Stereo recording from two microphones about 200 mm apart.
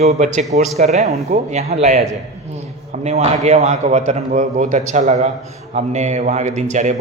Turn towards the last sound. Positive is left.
turn(degrees=-35)  # may be behind; listen again after turning